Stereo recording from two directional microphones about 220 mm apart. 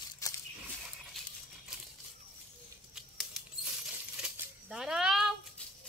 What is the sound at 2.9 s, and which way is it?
Patter, centre (ahead or behind).